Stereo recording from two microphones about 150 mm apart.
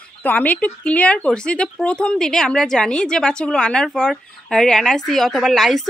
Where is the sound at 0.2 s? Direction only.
10° left (ahead or behind).